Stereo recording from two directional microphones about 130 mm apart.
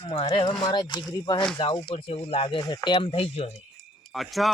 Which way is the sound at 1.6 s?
40° left (ahead or behind).